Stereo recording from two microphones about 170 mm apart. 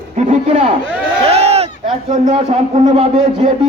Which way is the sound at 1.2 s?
35° right (ahead or behind).